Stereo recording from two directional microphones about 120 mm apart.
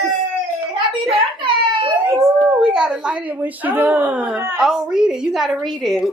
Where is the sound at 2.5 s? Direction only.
5° right (ahead or behind).